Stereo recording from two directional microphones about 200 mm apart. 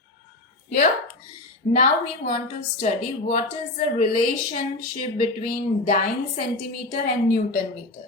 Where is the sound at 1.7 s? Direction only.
40° left (ahead or behind).